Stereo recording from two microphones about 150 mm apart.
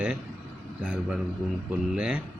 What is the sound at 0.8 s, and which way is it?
Speech, 5° right (ahead or behind).